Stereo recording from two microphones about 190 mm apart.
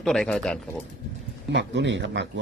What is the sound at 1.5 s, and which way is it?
Speech, 70° right (ahead or behind).